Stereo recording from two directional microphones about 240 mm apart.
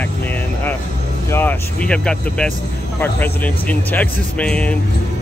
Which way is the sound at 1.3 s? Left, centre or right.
Centre.